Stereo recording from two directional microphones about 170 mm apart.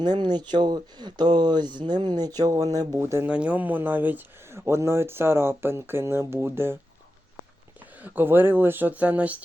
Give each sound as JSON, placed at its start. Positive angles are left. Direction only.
{"t": 0.0, "sound": "speech", "side_deg": -25}
{"t": 8.0, "sound": "speech", "side_deg": -10}